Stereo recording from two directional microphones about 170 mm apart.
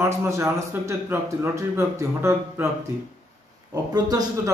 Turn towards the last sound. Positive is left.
turn(degrees=-20)  # may be behind; listen again after turning